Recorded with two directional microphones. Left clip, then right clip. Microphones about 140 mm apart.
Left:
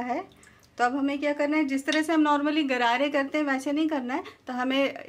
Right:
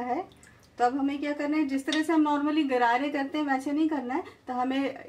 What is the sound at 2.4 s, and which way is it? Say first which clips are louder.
Speech: even; 35° left (ahead or behind).